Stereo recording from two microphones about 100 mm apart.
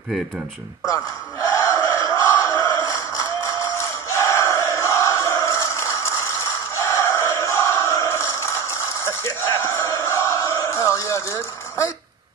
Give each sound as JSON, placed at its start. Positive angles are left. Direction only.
{"t": 0.8, "sound": "battle cry", "side_deg": 30}
{"t": 4.1, "sound": "crowd", "side_deg": 25}
{"t": 9.0, "sound": "a sound", "side_deg": 25}